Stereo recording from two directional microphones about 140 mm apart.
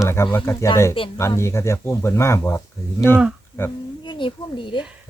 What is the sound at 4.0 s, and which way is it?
Speech, 35° left (ahead or behind).